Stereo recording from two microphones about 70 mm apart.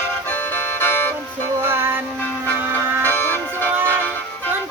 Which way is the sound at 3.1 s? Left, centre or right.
Left.